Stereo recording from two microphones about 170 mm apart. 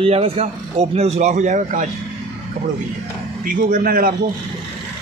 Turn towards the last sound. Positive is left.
turn(degrees=-55)  # may be behind; listen again after turning